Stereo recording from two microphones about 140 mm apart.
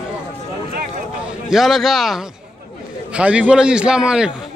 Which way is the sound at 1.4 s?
Centre (ahead or behind).